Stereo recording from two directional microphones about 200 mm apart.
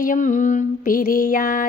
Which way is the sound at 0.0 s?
40° left (ahead or behind).